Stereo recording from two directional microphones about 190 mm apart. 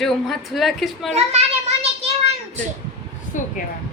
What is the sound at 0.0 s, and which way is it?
A woman's voice, centre (ahead or behind).